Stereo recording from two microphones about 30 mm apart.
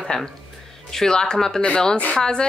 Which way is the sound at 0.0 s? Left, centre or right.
Centre.